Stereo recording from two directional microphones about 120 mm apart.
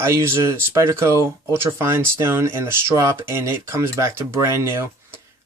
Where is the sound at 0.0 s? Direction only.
20° right (ahead or behind).